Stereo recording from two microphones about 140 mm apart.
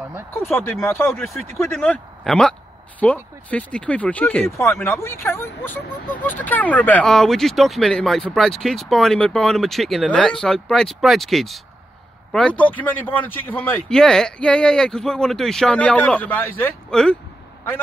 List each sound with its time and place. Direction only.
0.3 s speech: 15° left (ahead or behind)
1.2 s speech: centre (ahead or behind)